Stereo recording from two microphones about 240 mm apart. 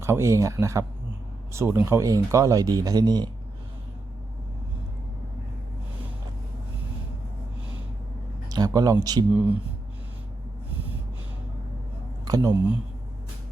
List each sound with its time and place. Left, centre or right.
0.0 s speech: centre
8.4 s speech: centre
12.2 s speech: centre